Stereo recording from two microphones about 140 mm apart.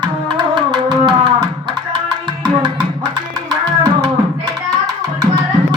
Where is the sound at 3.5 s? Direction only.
30° right (ahead or behind).